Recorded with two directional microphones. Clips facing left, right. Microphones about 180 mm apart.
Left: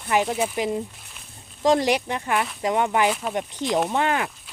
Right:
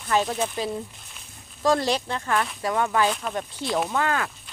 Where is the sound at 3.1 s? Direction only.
5° left (ahead or behind).